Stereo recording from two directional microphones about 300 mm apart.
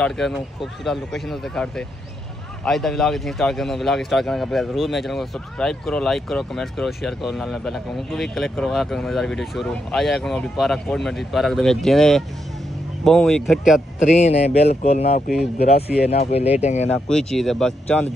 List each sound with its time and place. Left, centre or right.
0.0 s a man's voice: centre
14.1 s speech: left
16.8 s a man's voice: centre